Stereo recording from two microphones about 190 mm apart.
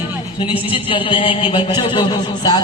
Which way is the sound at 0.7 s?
25° left (ahead or behind).